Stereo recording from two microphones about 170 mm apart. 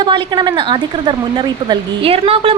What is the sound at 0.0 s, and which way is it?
Speech, 25° right (ahead or behind).